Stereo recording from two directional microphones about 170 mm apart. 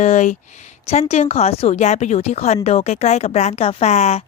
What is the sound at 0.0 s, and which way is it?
Speech, 45° left (ahead or behind).